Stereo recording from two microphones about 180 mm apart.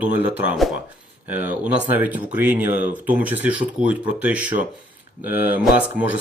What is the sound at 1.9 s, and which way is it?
Speech, 10° right (ahead or behind).